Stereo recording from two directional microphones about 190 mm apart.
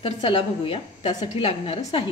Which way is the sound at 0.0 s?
25° left (ahead or behind).